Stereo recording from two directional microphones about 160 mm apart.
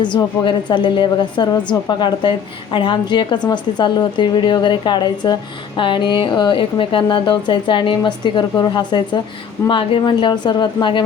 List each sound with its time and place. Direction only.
0.0 s a woman's voice: 30° left (ahead or behind)